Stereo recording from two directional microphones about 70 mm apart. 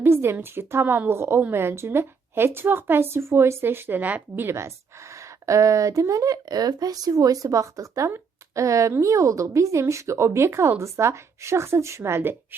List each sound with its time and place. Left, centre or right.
0.0 s a woman's voice: right
4.4 s a woman's voice: right
8.1 s a sound: right
8.9 s a woman's voice: right